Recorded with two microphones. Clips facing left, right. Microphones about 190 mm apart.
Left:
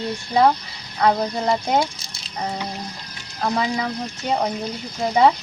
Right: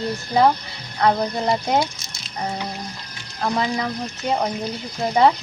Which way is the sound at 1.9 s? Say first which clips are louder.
Even; 35° left (ahead or behind).